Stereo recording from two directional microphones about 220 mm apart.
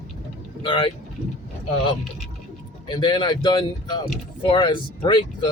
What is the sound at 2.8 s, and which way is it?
Speech, 20° left (ahead or behind).